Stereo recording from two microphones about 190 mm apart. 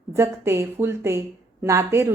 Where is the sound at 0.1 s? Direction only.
15° right (ahead or behind).